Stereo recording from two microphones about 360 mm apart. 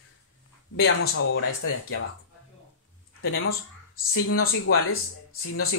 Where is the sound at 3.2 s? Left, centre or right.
Left.